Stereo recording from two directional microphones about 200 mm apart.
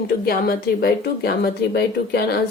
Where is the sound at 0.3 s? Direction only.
50° left (ahead or behind).